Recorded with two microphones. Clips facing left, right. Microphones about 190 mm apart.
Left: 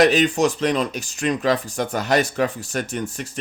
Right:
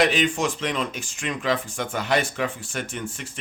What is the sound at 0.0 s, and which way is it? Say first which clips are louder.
Speech: left 5 dB; 40° left (ahead or behind).